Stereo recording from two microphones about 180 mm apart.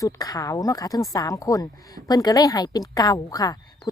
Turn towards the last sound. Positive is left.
turn(degrees=20)  # may be behind; listen again after turning